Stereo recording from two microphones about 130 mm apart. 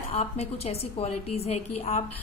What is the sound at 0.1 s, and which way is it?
A woman's voice, 55° left (ahead or behind).